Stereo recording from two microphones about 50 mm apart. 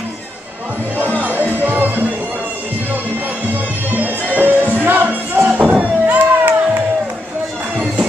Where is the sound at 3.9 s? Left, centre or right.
Right.